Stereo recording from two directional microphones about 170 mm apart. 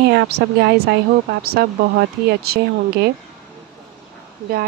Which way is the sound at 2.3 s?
65° right (ahead or behind).